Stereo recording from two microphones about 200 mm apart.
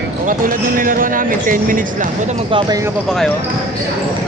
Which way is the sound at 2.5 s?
15° right (ahead or behind).